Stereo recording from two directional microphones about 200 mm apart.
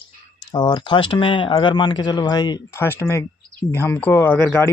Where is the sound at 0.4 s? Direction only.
20° left (ahead or behind).